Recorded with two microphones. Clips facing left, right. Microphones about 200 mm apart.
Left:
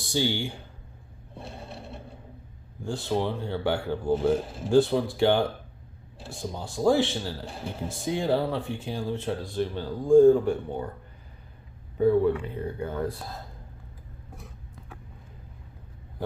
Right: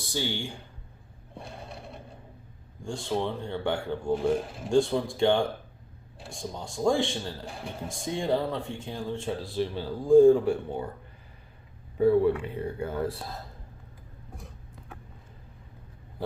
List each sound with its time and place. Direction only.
0.1 s speech: 20° left (ahead or behind)
2.8 s a man's voice: 5° left (ahead or behind)
9.2 s a man's voice: centre (ahead or behind)
11.9 s speech: 10° right (ahead or behind)